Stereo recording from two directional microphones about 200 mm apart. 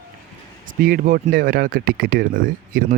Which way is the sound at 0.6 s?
40° right (ahead or behind).